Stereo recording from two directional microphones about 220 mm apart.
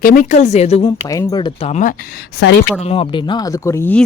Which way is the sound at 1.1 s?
15° left (ahead or behind).